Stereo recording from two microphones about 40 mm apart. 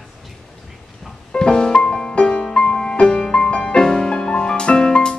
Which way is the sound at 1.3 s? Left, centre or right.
Centre.